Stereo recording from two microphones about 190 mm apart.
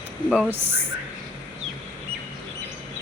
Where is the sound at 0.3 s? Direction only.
5° left (ahead or behind).